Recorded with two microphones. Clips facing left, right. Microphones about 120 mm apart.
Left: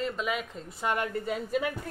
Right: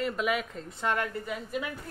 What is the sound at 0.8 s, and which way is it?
Speech, 15° left (ahead or behind).